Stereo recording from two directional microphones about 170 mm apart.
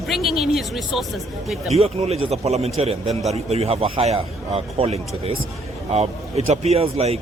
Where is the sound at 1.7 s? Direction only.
35° right (ahead or behind).